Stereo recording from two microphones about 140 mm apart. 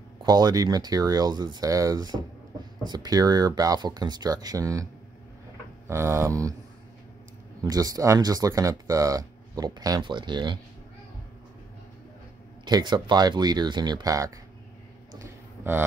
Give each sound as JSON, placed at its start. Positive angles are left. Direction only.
{"t": 0.2, "sound": "speech", "side_deg": -30}
{"t": 5.9, "sound": "speech", "side_deg": -20}
{"t": 7.6, "sound": "speech", "side_deg": -25}
{"t": 12.6, "sound": "speech", "side_deg": -30}
{"t": 15.1, "sound": "a sound", "side_deg": -15}